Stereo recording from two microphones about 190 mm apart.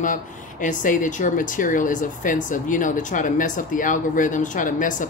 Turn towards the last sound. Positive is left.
turn(degrees=45)  # may be behind; listen again after turning